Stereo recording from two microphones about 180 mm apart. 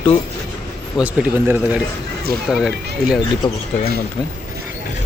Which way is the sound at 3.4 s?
25° left (ahead or behind).